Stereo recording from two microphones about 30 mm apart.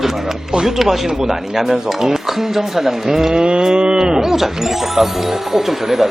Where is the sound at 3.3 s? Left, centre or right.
Right.